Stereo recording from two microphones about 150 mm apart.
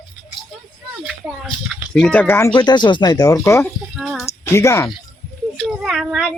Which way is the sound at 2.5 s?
30° left (ahead or behind).